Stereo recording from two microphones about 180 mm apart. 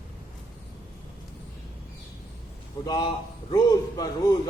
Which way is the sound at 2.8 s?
20° left (ahead or behind).